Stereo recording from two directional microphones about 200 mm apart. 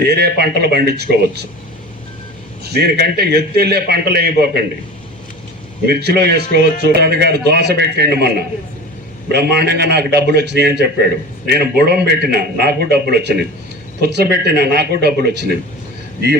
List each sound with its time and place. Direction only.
0.0 s a man's voice: 55° right (ahead or behind)
2.6 s a man's voice: 55° right (ahead or behind)
5.8 s a man's voice: 55° right (ahead or behind)